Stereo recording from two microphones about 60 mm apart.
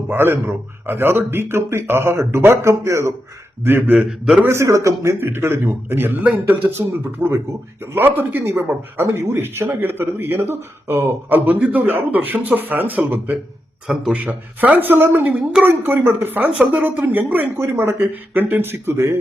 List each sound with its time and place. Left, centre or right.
0.1 s speech: right
3.6 s speech: right
4.4 s a man's voice: right
5.2 s speech: right
6.2 s speech: right
6.7 s speech: right
16.5 s speech: centre
16.8 s speech: right